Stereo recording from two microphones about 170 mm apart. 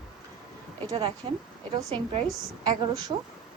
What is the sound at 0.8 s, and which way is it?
Speech, 30° right (ahead or behind).